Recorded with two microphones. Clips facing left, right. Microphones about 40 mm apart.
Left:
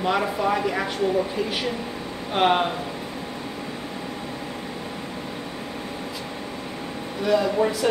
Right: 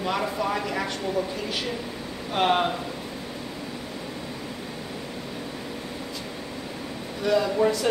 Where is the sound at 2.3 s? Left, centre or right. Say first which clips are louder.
Left 2 dB; centre.